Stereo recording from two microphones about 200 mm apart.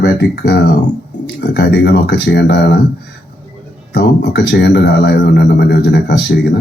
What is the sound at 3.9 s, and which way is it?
A man's voice, 55° left (ahead or behind).